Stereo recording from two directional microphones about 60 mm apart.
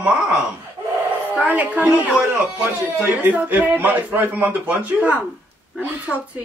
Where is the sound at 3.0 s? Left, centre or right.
Right.